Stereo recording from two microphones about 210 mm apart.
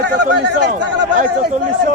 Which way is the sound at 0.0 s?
55° right (ahead or behind).